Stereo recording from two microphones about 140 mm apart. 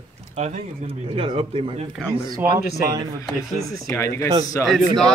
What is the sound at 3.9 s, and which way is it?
Speech, 20° left (ahead or behind).